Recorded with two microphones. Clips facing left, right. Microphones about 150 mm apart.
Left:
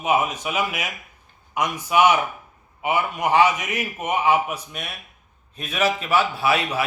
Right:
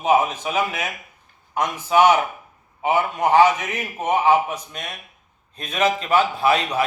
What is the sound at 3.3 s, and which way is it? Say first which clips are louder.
Speech: right 3 dB; 35° right (ahead or behind).